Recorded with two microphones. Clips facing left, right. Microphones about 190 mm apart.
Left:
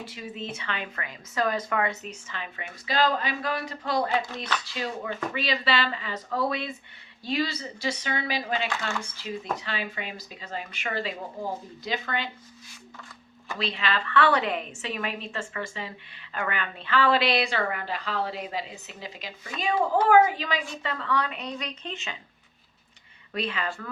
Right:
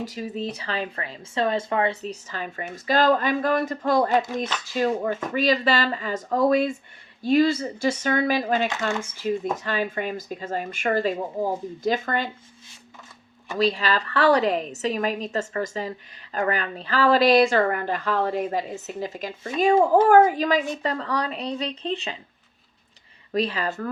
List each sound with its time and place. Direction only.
0.0 s speech: 40° right (ahead or behind)
13.6 s speech: 40° right (ahead or behind)
23.3 s speech: 35° right (ahead or behind)